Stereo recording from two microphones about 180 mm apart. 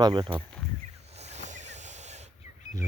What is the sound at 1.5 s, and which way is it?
Hiss, 40° right (ahead or behind).